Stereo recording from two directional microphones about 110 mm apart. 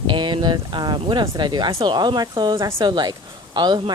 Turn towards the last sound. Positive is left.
turn(degrees=-40)  # may be behind; listen again after turning